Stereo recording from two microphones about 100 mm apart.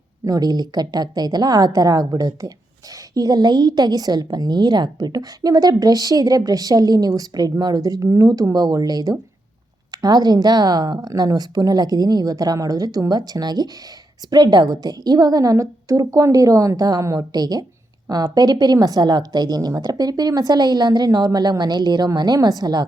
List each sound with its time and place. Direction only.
0.3 s a woman's voice: 40° right (ahead or behind)